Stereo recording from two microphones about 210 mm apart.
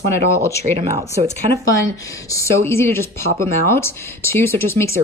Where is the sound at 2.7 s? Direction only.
10° left (ahead or behind).